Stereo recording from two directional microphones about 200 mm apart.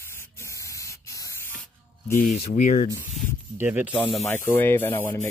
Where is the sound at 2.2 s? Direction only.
35° left (ahead or behind).